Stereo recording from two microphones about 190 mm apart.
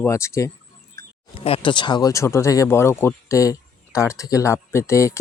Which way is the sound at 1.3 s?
30° left (ahead or behind).